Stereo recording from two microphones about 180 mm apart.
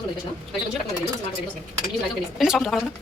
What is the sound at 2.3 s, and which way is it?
Speech, centre (ahead or behind).